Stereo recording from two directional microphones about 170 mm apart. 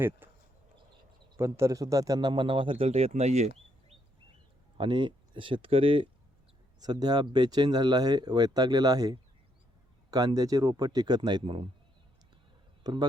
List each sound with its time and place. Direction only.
0.2 s a sound: 10° right (ahead or behind)
1.4 s a man's voice: 15° right (ahead or behind); by 3.9 s 40° right (ahead or behind)
4.8 s a man's voice: 30° right (ahead or behind)
12.8 s a man's voice: 25° right (ahead or behind)